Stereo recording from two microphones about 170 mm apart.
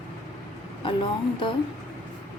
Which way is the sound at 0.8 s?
30° left (ahead or behind).